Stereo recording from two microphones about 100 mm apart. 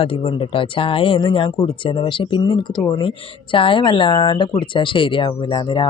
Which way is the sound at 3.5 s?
60° left (ahead or behind).